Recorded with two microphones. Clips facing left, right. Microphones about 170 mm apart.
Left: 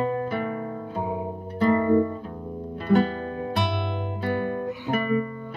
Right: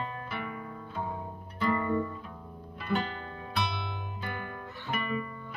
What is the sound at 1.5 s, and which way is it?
Music, 40° left (ahead or behind).